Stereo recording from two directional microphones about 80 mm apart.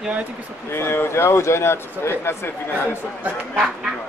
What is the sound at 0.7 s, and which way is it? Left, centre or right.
Speech, left.